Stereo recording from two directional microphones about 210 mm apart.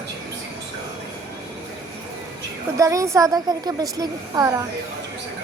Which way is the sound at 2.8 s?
15° right (ahead or behind).